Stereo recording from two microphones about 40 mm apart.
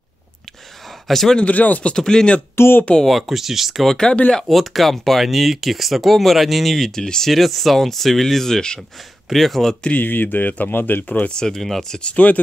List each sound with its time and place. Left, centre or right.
1.0 s speech: centre
1.4 s speech: left
2.0 s speech: centre
2.5 s speech: left
3.1 s speech: centre
3.8 s speech: centre
4.5 s speech: centre
7.0 s speech: centre
7.3 s speech: centre
9.3 s speech: centre
10.0 s speech: left
11.2 s speech: centre
11.6 s speech: centre
12.0 s speech: left